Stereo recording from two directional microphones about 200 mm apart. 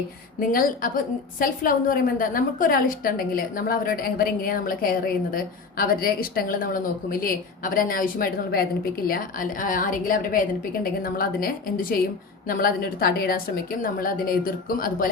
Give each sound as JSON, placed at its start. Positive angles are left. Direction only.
{"t": 0.3, "sound": "a woman's voice", "side_deg": 45}